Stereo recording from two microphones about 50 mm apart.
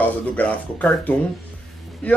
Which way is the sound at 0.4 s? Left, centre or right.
Left.